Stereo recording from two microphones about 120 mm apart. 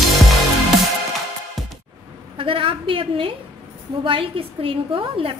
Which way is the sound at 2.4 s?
50° right (ahead or behind).